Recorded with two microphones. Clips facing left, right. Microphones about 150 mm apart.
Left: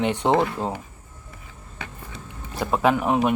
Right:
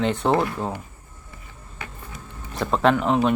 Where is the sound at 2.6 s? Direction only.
10° left (ahead or behind).